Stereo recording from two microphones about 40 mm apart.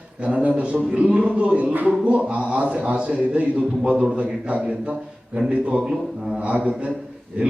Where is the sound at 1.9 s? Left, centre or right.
Right.